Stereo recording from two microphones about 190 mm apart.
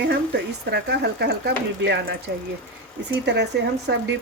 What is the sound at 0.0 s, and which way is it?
Speech, 60° right (ahead or behind).